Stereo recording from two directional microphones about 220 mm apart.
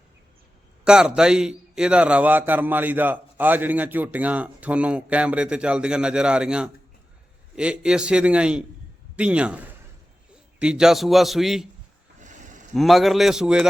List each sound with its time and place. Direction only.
0.9 s a man's voice: 5° right (ahead or behind)
12.2 s a sound: 35° right (ahead or behind)
12.7 s a man's voice: centre (ahead or behind)